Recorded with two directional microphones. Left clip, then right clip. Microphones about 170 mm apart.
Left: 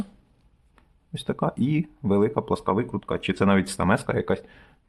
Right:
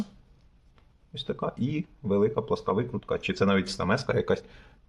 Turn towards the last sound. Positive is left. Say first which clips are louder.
# left 1 dB
turn(degrees=15)  # may be behind; listen again after turning